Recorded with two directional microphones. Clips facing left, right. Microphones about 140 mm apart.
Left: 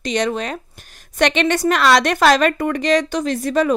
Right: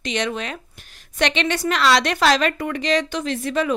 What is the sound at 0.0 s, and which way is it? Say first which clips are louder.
A woman's voice: left 4 dB; 40° left (ahead or behind).